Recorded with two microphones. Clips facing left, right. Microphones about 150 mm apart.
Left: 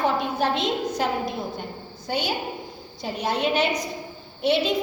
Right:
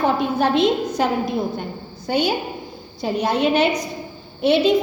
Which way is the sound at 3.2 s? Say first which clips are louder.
Right 5 dB; 65° right (ahead or behind).